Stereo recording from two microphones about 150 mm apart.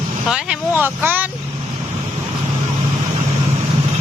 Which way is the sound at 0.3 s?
5° right (ahead or behind).